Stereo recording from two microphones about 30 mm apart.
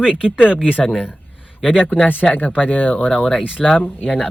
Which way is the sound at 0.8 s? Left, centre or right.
Left.